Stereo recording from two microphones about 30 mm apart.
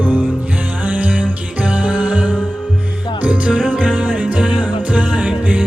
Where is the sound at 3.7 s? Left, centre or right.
Right.